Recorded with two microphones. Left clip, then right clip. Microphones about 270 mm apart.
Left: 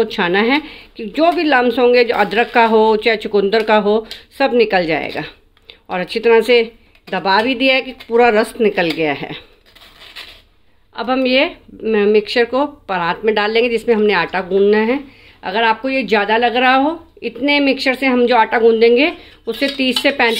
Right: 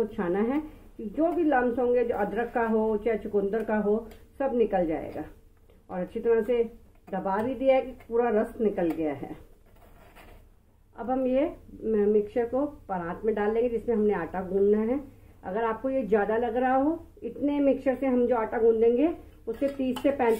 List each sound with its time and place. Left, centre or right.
0.1 s speech: left
11.0 s speech: left